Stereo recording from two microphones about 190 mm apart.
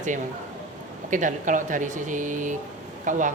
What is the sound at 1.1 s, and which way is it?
Speech, 40° right (ahead or behind).